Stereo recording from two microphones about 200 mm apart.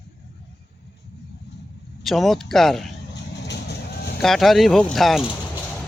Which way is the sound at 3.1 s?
60° left (ahead or behind).